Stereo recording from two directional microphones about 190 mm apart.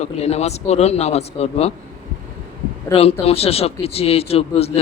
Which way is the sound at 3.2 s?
30° left (ahead or behind).